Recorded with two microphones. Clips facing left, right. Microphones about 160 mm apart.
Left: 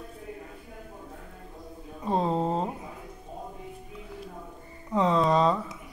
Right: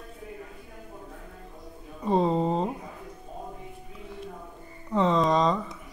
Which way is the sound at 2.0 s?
Centre (ahead or behind).